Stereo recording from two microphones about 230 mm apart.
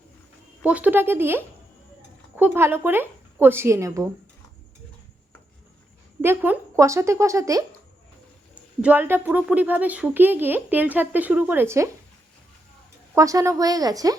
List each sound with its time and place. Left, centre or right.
0.6 s a woman's voice: centre
6.2 s a woman's voice: centre
13.1 s a woman's voice: centre